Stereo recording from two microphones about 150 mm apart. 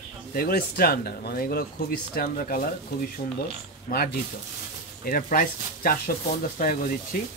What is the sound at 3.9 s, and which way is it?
Speech, 60° left (ahead or behind).